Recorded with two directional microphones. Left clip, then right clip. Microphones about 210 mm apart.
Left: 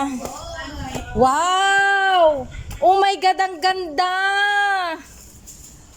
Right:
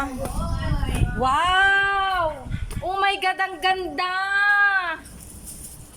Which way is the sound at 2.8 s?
30° left (ahead or behind).